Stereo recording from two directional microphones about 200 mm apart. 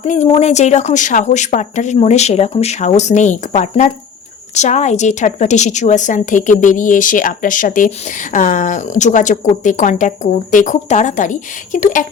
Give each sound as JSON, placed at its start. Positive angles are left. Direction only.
{"t": 0.0, "sound": "a woman's voice", "side_deg": 35}